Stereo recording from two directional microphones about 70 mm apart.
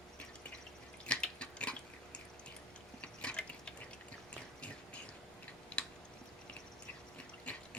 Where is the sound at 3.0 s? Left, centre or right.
Centre.